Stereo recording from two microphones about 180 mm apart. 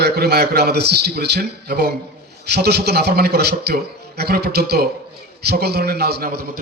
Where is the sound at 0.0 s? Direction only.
60° right (ahead or behind).